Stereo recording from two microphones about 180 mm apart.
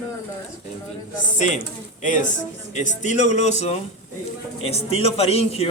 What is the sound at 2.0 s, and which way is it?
A woman's voice, 45° left (ahead or behind).